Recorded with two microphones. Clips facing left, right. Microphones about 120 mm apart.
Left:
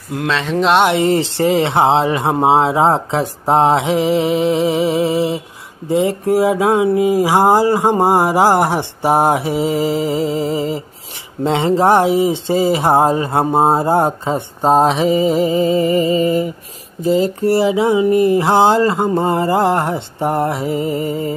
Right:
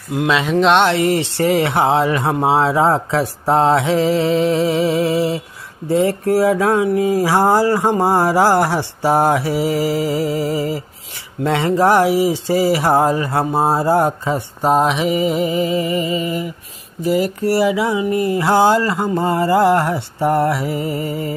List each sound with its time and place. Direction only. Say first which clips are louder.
0.1 s speech: right 2 dB; 5° right (ahead or behind)
0.8 s speech: left 2 dB; 25° left (ahead or behind)